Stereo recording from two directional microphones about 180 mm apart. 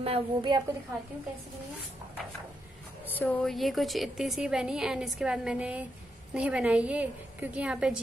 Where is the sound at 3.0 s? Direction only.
10° left (ahead or behind).